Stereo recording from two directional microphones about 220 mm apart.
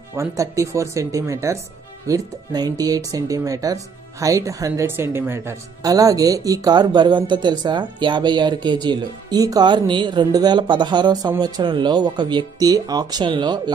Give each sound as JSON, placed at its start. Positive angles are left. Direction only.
{"t": 0.1, "sound": "speech", "side_deg": -15}